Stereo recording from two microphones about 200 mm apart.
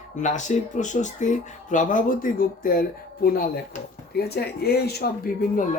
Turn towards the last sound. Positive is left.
turn(degrees=50)  # may be behind; listen again after turning